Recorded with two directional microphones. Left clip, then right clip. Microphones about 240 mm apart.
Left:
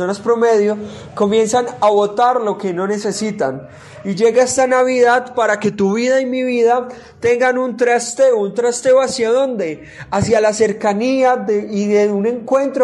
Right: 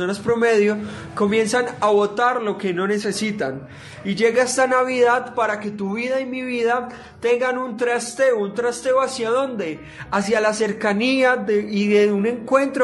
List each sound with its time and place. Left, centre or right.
0.4 s a man's voice: centre; by 5.6 s left
5.6 s a man's voice: left; by 10.9 s centre
10.9 s speech: centre